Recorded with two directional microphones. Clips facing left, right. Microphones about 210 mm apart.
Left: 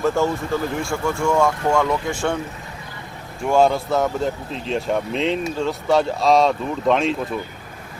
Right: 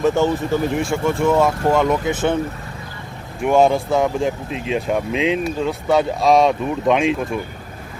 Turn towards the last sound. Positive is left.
turn(degrees=-15)  # may be behind; listen again after turning